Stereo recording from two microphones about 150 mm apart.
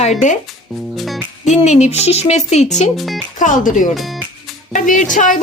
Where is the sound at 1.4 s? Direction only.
50° left (ahead or behind).